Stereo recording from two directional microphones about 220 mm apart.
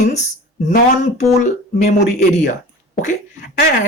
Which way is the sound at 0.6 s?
30° left (ahead or behind).